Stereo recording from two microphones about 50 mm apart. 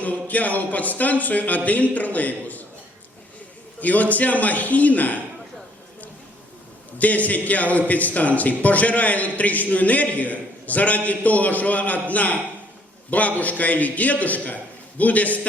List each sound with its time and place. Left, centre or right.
0.0 s a man's voice: left
3.8 s a man's voice: left
7.0 s a man's voice: left